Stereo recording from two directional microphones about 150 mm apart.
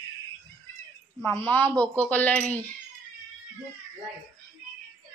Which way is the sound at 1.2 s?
15° left (ahead or behind).